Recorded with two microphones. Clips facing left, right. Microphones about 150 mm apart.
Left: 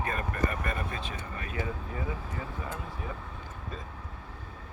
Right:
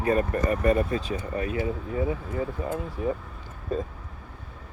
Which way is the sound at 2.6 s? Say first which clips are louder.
Right 8 dB; 40° right (ahead or behind).